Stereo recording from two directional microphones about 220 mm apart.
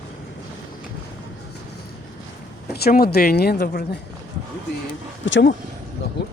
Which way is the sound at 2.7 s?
45° left (ahead or behind).